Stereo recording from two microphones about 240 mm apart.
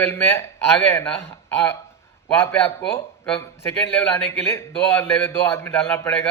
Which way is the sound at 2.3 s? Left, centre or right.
Centre.